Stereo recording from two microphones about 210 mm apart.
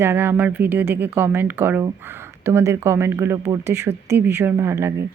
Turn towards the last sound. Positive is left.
turn(degrees=-10)  # may be behind; listen again after turning